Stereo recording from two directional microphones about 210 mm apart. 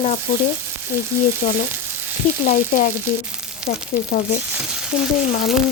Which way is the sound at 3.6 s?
5° right (ahead or behind).